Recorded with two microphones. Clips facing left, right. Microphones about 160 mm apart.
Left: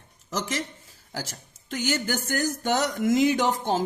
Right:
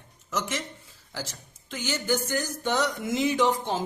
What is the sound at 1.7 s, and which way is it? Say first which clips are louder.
A man's voice: left 1 dB; 45° left (ahead or behind).